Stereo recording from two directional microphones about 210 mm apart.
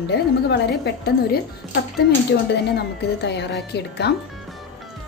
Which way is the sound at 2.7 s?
55° left (ahead or behind).